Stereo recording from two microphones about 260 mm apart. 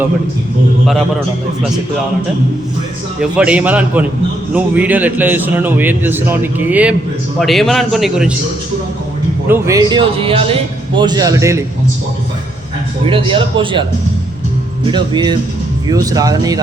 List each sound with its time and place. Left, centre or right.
3.2 s a man's voice: centre
9.5 s a man's voice: centre
13.1 s a man's voice: centre
14.8 s a man's voice: centre